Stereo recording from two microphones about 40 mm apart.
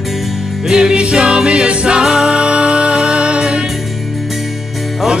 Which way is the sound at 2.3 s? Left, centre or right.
Right.